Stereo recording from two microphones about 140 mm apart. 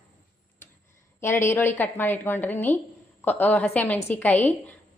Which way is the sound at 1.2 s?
20° left (ahead or behind).